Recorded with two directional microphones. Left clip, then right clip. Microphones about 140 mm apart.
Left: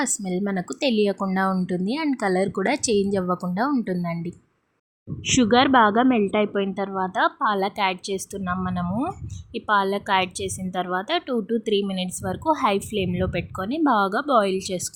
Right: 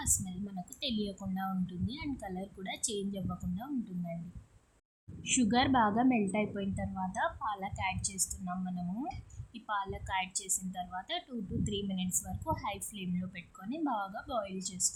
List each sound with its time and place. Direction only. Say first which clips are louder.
0.0 s a woman's voice: left 12 dB; 50° left (ahead or behind)
5.2 s a woman's voice: left 12 dB; 45° left (ahead or behind)